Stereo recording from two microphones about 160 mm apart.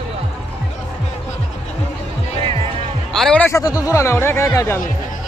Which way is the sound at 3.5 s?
20° left (ahead or behind).